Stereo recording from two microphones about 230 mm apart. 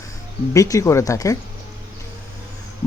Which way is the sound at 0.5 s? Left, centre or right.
Centre.